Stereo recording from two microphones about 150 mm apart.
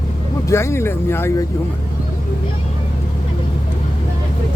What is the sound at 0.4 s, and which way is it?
Speech, 20° left (ahead or behind).